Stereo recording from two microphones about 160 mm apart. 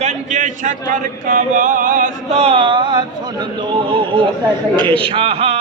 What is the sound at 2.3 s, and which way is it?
Music, 40° right (ahead or behind).